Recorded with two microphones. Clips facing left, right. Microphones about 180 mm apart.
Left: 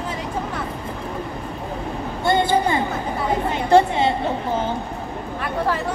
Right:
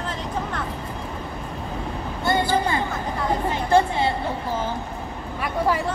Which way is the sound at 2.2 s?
25° left (ahead or behind).